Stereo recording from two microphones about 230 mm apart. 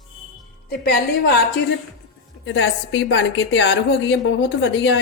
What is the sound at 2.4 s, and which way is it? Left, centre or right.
Speech, left.